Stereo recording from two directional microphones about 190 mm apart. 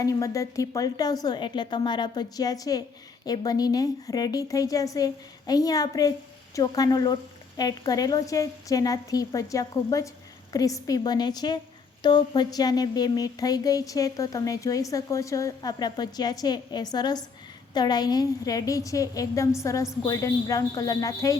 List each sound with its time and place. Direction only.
0.0 s a woman's voice: 15° left (ahead or behind)